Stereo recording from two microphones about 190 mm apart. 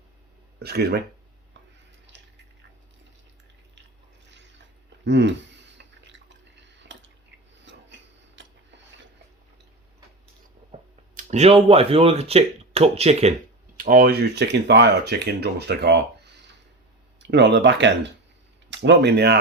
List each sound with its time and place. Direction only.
0.6 s speech: 55° right (ahead or behind)
4.3 s a sound: 70° right (ahead or behind)
5.0 s speech: 70° right (ahead or behind)
5.7 s a sound: 70° right (ahead or behind)
10.7 s speech: 40° right (ahead or behind)
13.7 s speech: 50° right (ahead or behind)